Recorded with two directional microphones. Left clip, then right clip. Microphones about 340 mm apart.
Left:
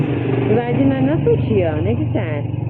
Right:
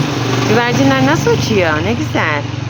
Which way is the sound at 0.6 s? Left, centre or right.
Centre.